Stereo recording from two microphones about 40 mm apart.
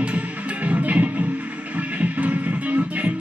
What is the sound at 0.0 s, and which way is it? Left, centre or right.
Music, right.